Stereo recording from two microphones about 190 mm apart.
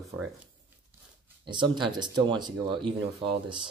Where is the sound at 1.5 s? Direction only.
25° right (ahead or behind).